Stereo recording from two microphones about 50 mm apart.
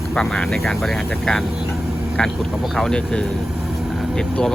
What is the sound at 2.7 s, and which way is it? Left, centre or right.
Speech, centre.